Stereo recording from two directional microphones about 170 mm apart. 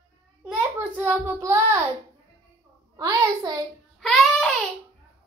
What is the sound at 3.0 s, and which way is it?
Speech, 25° right (ahead or behind).